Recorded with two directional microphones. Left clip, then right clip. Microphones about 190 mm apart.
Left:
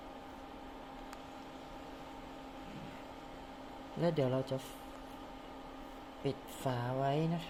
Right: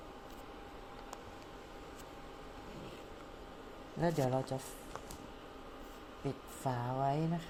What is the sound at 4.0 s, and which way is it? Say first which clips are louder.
Speech: even; 15° left (ahead or behind).